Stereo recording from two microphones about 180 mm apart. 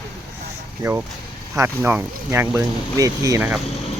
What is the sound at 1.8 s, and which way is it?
Speech, 10° right (ahead or behind).